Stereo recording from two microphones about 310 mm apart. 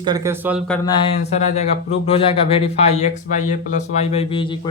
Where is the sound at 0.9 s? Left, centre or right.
Centre.